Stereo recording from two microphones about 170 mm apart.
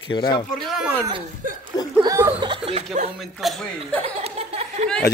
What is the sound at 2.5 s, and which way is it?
Speech, 35° right (ahead or behind).